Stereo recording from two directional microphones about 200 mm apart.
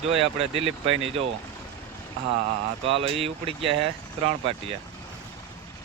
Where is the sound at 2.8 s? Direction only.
30° right (ahead or behind).